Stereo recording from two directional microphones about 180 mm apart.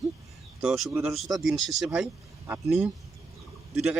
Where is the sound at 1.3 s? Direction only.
Centre (ahead or behind).